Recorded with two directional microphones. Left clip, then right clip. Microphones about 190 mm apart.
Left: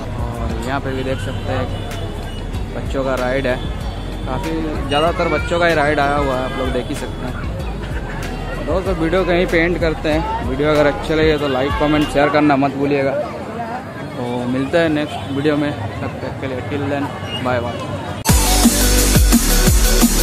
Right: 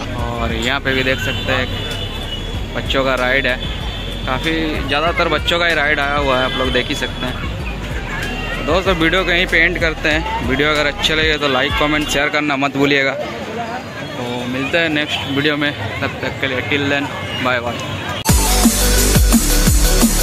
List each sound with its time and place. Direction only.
0.7 s speech: 5° right (ahead or behind)
2.9 s speech: 5° right (ahead or behind)
5.2 s speech: 5° left (ahead or behind)
8.7 s speech: 5° left (ahead or behind)
14.7 s speech: 20° left (ahead or behind)
15.4 s speech: centre (ahead or behind)
18.2 s music: centre (ahead or behind)